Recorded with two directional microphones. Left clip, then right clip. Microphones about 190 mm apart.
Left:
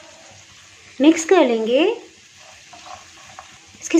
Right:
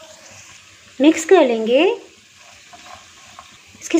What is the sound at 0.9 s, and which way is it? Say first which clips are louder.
Speech: right 2 dB; 10° right (ahead or behind).